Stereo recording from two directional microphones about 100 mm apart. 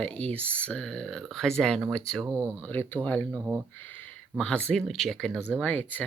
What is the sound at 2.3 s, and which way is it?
Speech, 30° right (ahead or behind).